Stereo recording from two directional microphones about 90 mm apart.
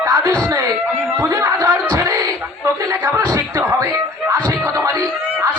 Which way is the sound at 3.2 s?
35° right (ahead or behind).